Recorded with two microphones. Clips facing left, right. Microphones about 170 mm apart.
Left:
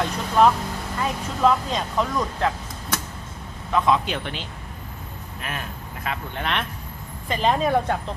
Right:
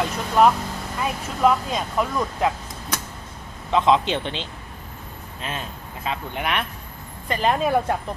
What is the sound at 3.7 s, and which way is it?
A man's voice, 20° right (ahead or behind).